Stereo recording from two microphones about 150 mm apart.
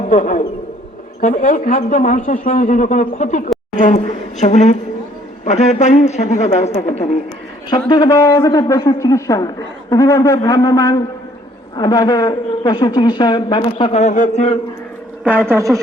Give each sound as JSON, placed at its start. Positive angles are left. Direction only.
{"t": 0.1, "sound": "a man's voice", "side_deg": 60}
{"t": 7.7, "sound": "a man's voice", "side_deg": 30}
{"t": 14.0, "sound": "speech", "side_deg": 55}
{"t": 15.2, "sound": "a woman's voice", "side_deg": -10}